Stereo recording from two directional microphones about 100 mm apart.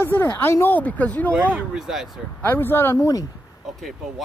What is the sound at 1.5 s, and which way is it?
Speech, 10° right (ahead or behind).